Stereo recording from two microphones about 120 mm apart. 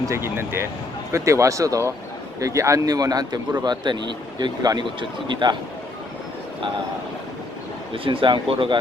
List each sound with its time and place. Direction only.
0.0 s speech: 25° right (ahead or behind); by 5.5 s 40° right (ahead or behind)
7.9 s speech: 45° right (ahead or behind)